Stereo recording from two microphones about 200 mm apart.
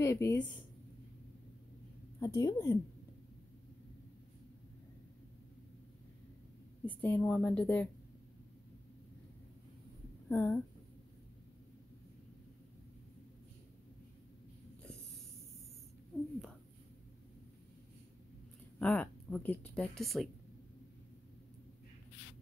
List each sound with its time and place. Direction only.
0.0 s a woman's voice: 15° left (ahead or behind)
2.1 s speech: 20° left (ahead or behind)
6.8 s speech: 10° left (ahead or behind)
10.3 s speech: 10° left (ahead or behind)
18.8 s speech: 10° left (ahead or behind)